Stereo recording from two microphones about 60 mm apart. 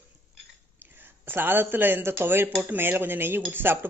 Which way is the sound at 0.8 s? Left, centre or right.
Right.